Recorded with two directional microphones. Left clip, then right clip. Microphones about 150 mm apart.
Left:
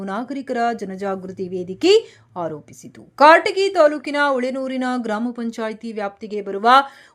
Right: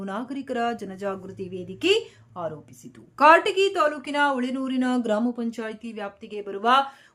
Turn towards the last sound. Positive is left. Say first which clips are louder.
# left 7 dB
turn(degrees=40)  # may be behind; listen again after turning